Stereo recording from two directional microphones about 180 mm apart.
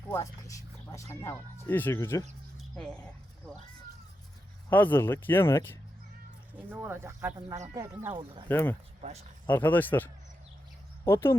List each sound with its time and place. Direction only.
0.1 s speech: 15° left (ahead or behind)
2.7 s speech: 5° left (ahead or behind)
4.7 s speech: 10° left (ahead or behind)
6.5 s speech: 10° right (ahead or behind); by 8.4 s 25° right (ahead or behind)
8.4 s speech: 10° left (ahead or behind)